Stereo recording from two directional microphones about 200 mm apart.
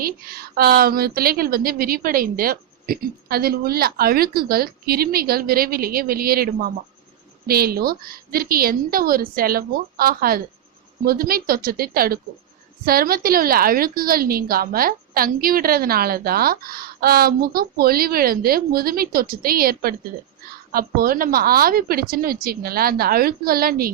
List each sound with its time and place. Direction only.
0.0 s a woman's voice: 50° right (ahead or behind)